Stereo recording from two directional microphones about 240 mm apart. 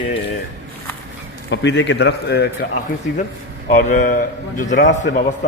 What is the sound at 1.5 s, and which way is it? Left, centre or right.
A man's voice, left.